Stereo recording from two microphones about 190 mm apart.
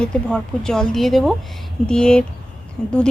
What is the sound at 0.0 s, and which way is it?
A woman's voice, 5° left (ahead or behind).